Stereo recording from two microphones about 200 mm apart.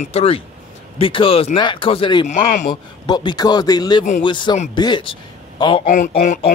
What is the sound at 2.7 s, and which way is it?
A man's voice, 20° left (ahead or behind).